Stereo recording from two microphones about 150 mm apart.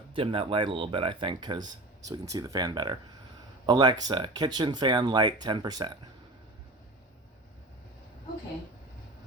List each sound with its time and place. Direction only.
0.1 s speech: 35° right (ahead or behind)